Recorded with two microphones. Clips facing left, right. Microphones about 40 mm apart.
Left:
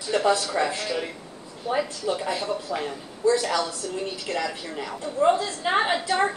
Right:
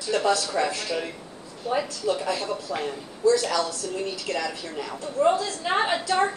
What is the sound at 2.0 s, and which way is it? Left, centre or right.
Speech, left.